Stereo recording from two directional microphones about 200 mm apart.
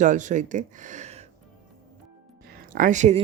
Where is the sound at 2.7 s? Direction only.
40° right (ahead or behind).